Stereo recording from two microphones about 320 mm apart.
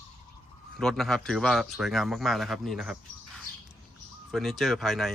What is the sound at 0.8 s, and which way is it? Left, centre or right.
Speech, centre.